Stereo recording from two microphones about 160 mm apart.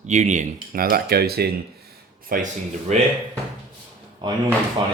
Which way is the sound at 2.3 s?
50° right (ahead or behind).